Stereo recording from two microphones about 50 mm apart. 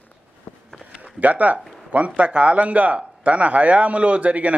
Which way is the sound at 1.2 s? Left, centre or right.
Right.